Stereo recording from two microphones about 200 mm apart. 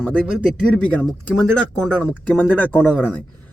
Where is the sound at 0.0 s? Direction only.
5° left (ahead or behind).